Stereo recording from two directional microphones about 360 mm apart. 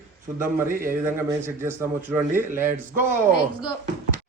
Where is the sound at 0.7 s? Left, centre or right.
Right.